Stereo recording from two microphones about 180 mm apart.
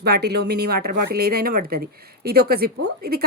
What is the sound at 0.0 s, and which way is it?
A woman's voice, 65° right (ahead or behind).